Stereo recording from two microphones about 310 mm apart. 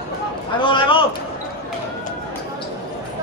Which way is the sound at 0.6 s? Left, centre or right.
Centre.